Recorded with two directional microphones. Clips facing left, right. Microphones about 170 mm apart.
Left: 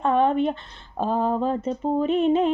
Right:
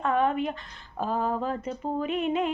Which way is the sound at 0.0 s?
30° left (ahead or behind).